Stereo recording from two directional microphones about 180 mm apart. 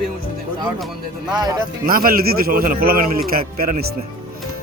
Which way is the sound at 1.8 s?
55° right (ahead or behind).